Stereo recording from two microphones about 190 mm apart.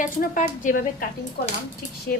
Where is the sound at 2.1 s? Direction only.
50° left (ahead or behind).